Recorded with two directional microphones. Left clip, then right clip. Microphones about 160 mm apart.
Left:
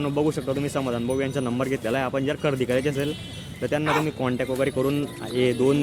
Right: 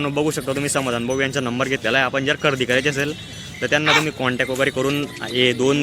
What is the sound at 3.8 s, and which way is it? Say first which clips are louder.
Speech: right 7 dB; 45° left (ahead or behind).